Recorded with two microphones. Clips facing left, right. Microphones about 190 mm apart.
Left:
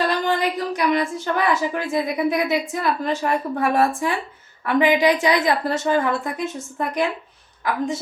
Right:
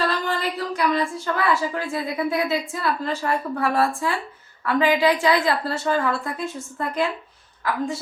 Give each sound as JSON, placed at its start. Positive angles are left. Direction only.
{"t": 0.0, "sound": "a woman's voice", "side_deg": 15}